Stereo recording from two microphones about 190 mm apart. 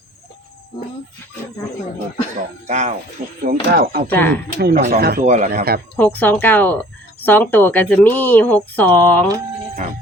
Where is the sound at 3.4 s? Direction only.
50° right (ahead or behind).